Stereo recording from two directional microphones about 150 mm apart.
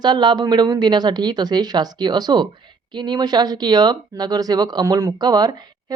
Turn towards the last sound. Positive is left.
turn(degrees=-25)  # may be behind; listen again after turning